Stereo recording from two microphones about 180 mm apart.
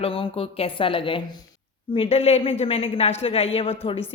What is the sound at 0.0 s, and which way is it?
A woman's voice, 30° left (ahead or behind).